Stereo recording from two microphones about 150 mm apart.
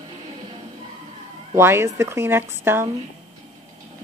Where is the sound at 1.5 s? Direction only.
15° right (ahead or behind).